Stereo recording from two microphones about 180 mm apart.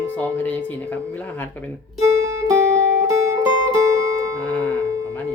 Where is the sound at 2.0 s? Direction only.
20° right (ahead or behind).